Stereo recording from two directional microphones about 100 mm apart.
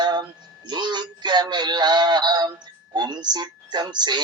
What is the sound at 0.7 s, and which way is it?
Synthetic singing, 50° right (ahead or behind).